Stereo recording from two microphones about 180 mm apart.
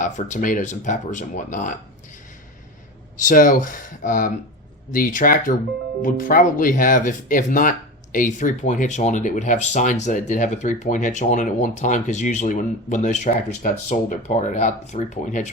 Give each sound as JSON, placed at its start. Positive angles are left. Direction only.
{"t": 0.0, "sound": "speech", "side_deg": 45}
{"t": 3.2, "sound": "speech", "side_deg": 50}